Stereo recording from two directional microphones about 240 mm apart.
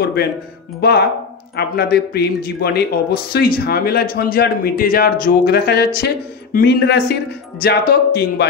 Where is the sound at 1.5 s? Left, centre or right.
Left.